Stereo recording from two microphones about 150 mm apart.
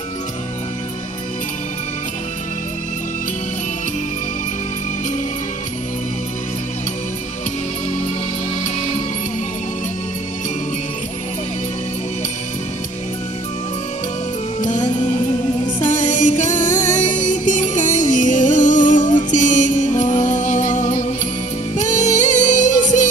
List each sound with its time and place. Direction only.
14.6 s music: 55° left (ahead or behind)